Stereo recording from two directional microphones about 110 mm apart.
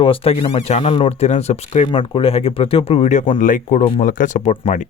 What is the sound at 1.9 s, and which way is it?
Speech, 55° left (ahead or behind).